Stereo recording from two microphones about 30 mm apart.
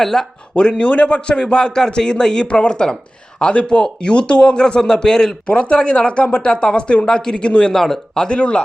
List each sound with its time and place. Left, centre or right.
0.0 s speech: centre
0.8 s speech: left
1.4 s speech: left
5.5 s speech: left
7.7 s speech: centre
8.3 s speech: left